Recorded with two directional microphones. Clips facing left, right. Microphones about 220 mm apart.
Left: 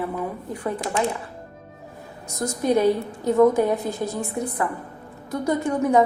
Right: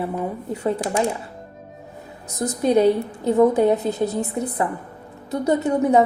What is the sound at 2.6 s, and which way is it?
A woman's voice, 20° right (ahead or behind).